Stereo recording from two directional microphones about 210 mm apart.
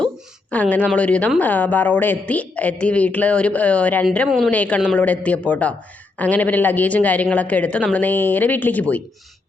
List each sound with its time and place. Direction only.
0.5 s a woman's voice: 5° left (ahead or behind)